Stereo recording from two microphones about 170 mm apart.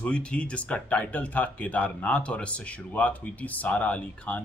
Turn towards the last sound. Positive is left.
turn(degrees=10)  # may be behind; listen again after turning